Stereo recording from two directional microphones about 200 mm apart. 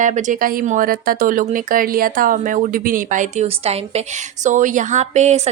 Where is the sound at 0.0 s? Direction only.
40° right (ahead or behind).